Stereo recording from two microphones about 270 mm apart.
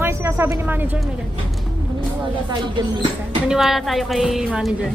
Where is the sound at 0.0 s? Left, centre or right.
Centre.